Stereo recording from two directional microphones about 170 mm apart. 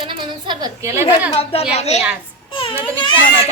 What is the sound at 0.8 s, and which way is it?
Speech, 15° right (ahead or behind).